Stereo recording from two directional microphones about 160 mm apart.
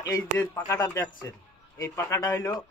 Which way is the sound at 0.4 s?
15° left (ahead or behind).